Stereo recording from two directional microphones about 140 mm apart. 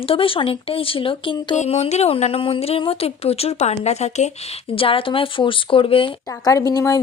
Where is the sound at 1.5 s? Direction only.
50° left (ahead or behind).